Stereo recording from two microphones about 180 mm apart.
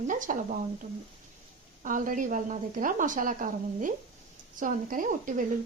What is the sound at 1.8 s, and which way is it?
A woman's voice, 45° right (ahead or behind).